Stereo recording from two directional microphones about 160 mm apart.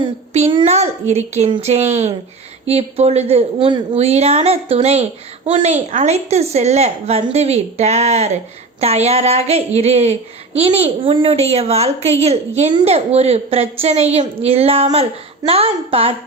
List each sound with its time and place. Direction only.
0.3 s a child's voice: 40° right (ahead or behind)